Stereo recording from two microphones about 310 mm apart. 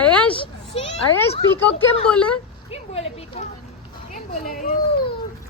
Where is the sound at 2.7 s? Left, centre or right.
Centre.